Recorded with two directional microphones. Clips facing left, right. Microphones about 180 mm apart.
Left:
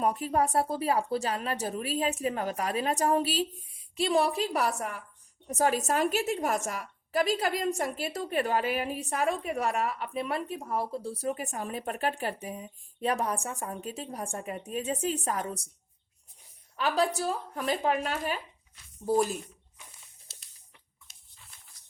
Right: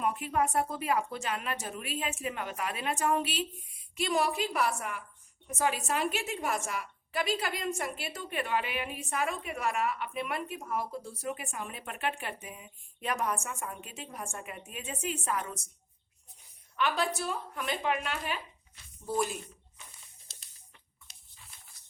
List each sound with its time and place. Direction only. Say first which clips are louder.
0.0 s a woman's voice: left 3 dB; 40° left (ahead or behind)
16.7 s a woman's voice: left 3 dB; 35° left (ahead or behind)
21.1 s a sound: right 2 dB; centre (ahead or behind)